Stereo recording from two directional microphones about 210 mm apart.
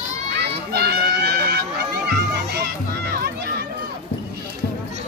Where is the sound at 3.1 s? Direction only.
50° right (ahead or behind).